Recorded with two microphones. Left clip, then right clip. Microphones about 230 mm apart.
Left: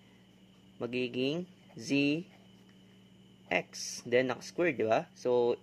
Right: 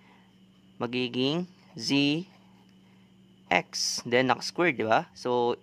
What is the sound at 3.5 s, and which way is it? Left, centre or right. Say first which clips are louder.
Speech: right 7 dB; right.